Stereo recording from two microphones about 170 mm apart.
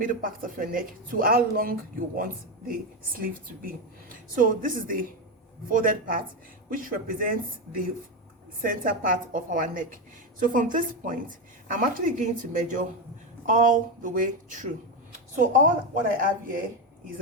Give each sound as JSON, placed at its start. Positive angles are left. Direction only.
{"t": 0.0, "sound": "a woman's voice", "side_deg": -55}
{"t": 8.6, "sound": "a woman's voice", "side_deg": -55}
{"t": 16.1, "sound": "speech", "side_deg": -55}